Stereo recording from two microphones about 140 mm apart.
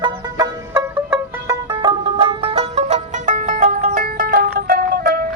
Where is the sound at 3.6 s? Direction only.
80° right.